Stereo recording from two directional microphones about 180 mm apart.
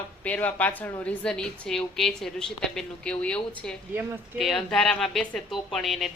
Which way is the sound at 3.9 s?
10° right (ahead or behind).